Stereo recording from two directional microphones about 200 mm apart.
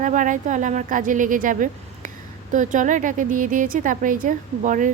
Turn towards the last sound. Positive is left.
turn(degrees=-40)  # may be behind; listen again after turning